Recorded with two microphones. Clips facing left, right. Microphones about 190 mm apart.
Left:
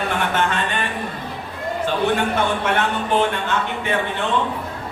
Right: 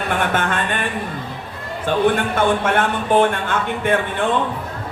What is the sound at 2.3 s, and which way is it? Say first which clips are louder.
Speech: right 3 dB; 50° right (ahead or behind).